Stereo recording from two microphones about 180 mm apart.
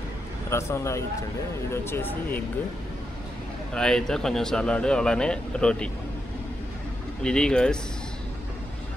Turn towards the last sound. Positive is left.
turn(degrees=5)  # may be behind; listen again after turning